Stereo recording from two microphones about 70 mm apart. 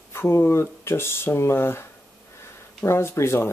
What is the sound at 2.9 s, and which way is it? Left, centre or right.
Speech, left.